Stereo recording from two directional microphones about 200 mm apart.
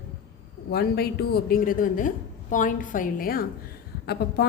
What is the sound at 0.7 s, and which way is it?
A woman's voice, 50° left (ahead or behind).